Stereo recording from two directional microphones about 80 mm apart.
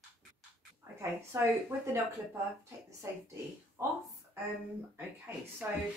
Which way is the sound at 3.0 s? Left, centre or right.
Right.